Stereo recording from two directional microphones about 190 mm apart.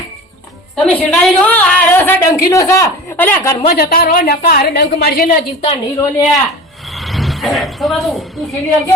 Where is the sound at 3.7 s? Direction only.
55° left (ahead or behind).